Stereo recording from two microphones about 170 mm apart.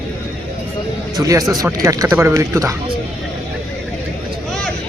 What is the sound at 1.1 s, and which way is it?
Speech, 20° right (ahead or behind).